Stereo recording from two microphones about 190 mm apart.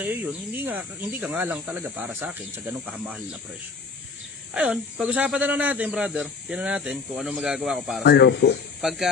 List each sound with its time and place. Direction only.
0.0 s speech: 10° right (ahead or behind)
4.6 s speech: 5° right (ahead or behind)
8.0 s speech: 65° left (ahead or behind)
8.8 s speech: centre (ahead or behind)